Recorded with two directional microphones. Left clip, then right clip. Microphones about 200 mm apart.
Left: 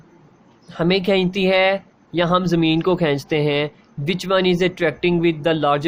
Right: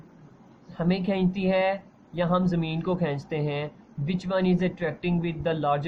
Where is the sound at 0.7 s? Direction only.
50° left (ahead or behind).